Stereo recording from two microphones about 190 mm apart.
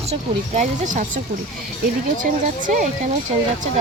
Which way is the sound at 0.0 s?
35° right (ahead or behind).